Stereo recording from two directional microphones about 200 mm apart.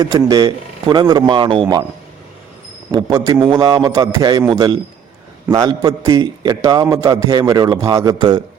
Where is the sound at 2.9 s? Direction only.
20° right (ahead or behind).